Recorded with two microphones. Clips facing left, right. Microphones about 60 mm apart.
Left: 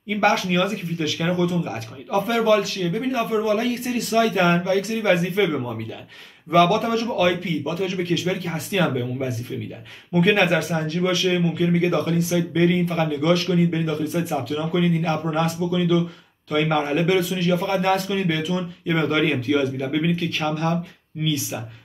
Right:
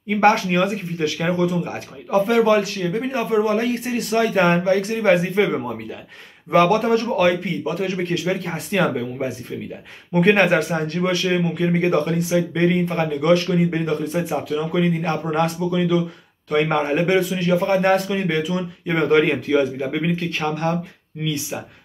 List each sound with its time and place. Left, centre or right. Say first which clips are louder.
0.1 s speech: right 3 dB; right
14.5 s a man's voice: right 2 dB; right